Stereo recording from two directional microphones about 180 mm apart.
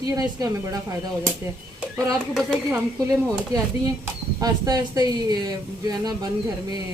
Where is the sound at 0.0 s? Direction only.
20° right (ahead or behind).